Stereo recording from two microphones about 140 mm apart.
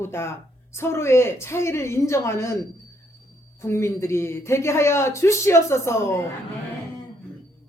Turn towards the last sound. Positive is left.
turn(degrees=20)  # may be behind; listen again after turning